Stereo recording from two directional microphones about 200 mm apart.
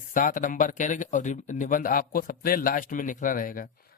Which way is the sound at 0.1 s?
40° left (ahead or behind).